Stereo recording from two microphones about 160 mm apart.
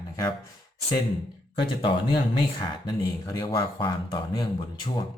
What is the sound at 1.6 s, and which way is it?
Speech, 35° left (ahead or behind).